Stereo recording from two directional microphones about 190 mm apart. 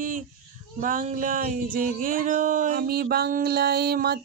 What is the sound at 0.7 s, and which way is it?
Speech, 45° right (ahead or behind).